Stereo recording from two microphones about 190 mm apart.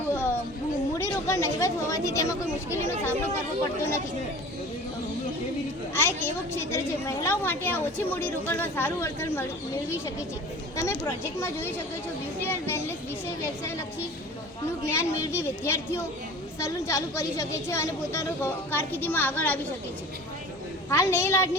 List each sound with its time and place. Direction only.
0.1 s a sound: 15° left (ahead or behind)
0.9 s a woman's voice: 15° left (ahead or behind)
5.9 s a woman's voice: 10° left (ahead or behind)
10.8 s a woman's voice: 15° left (ahead or behind)
12.4 s children playing: 10° left (ahead or behind)
14.8 s a woman's voice: 15° left (ahead or behind)
20.9 s a woman's voice: 15° left (ahead or behind)